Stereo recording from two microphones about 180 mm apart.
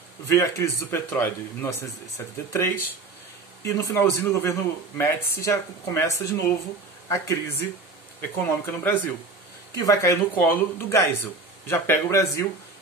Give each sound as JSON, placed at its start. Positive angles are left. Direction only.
{"t": 0.3, "sound": "speech", "side_deg": 15}